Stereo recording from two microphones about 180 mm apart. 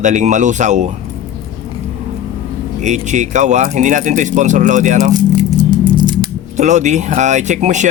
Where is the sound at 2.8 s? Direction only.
40° right (ahead or behind).